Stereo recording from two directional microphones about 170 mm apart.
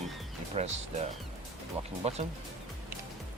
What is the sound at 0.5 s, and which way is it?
Speech, 40° right (ahead or behind).